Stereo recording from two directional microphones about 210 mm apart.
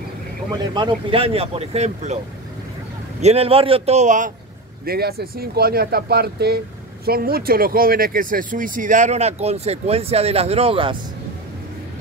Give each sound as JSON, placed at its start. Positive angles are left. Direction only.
{"t": 0.6, "sound": "speech", "side_deg": -20}
{"t": 3.2, "sound": "speech", "side_deg": -30}
{"t": 4.8, "sound": "speech", "side_deg": -45}